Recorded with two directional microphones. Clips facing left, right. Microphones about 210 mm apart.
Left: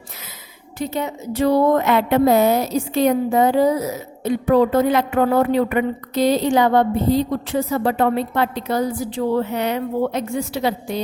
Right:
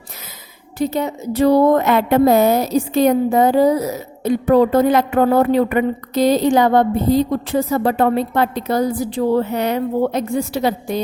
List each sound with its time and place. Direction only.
0.8 s a woman's voice: 40° right (ahead or behind)